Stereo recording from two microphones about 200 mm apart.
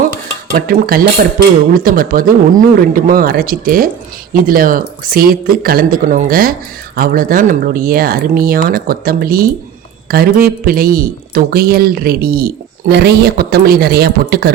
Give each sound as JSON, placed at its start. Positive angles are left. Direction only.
{"t": 0.5, "sound": "speech", "side_deg": -45}